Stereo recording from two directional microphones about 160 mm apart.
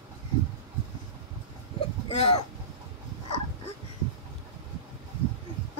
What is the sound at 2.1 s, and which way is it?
Throat clearing, 40° left (ahead or behind).